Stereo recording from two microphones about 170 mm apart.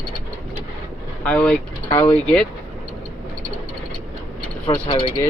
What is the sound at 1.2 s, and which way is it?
Speech, 5° left (ahead or behind).